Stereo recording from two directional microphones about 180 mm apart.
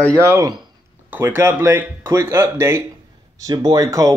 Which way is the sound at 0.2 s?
15° right (ahead or behind).